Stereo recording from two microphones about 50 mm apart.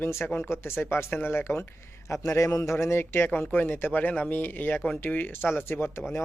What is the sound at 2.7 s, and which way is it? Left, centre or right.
Speech, left.